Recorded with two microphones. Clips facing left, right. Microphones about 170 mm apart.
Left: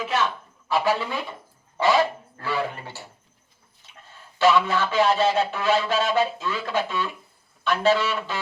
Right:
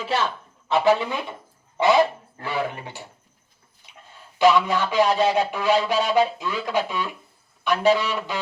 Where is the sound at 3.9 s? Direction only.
15° right (ahead or behind).